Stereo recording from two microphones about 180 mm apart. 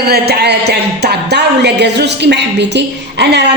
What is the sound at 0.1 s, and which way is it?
A woman's voice, 65° right (ahead or behind).